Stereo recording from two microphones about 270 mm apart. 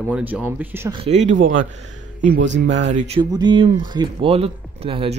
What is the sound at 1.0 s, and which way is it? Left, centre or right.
Speech, right.